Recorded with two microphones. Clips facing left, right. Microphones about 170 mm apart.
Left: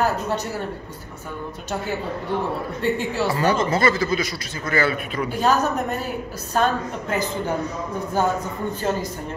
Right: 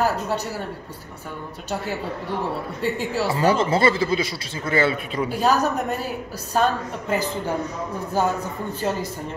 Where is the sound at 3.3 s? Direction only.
30° right (ahead or behind).